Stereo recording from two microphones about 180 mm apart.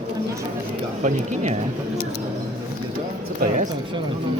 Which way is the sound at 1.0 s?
40° right (ahead or behind).